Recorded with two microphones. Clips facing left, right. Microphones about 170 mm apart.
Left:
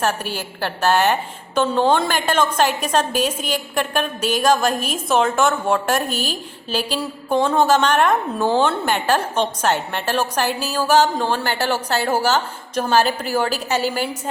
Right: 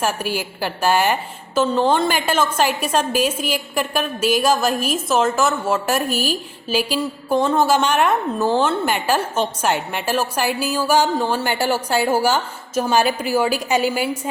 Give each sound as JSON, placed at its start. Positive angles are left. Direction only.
{"t": 0.0, "sound": "a woman's voice", "side_deg": -10}